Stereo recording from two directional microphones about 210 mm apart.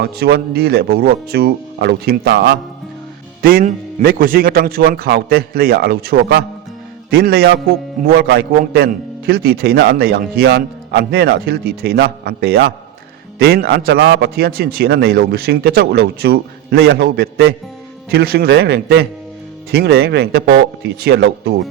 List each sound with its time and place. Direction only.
0.0 s a man's voice: 50° right (ahead or behind)
3.4 s a man's voice: 45° right (ahead or behind)